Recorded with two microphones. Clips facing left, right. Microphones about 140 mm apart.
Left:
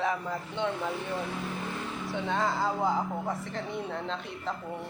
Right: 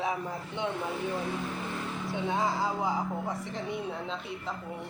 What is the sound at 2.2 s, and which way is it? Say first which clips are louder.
Speech: left 1 dB; 20° right (ahead or behind).